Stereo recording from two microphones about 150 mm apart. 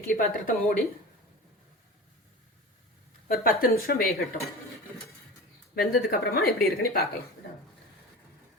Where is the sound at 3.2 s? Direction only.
75° left (ahead or behind).